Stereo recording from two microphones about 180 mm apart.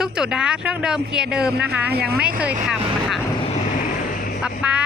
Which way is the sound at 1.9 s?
60° right (ahead or behind).